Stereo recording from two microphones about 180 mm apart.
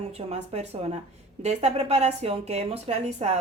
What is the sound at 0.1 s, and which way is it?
A woman's voice, 35° right (ahead or behind).